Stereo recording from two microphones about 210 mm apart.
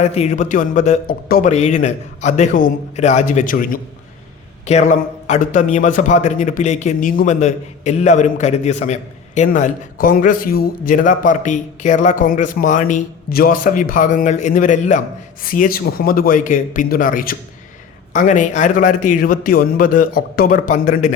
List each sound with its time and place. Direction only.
0.0 s a man's voice: 30° left (ahead or behind)